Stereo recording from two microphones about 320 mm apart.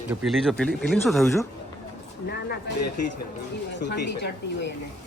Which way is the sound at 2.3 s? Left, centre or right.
Left.